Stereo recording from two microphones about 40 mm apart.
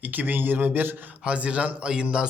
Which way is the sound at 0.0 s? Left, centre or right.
Right.